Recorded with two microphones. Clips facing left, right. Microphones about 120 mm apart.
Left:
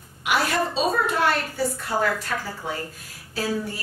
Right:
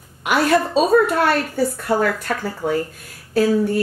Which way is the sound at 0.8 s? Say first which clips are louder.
Right 5 dB; 50° right (ahead or behind).